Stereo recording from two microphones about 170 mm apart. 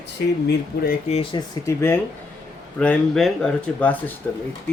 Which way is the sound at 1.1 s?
40° left (ahead or behind).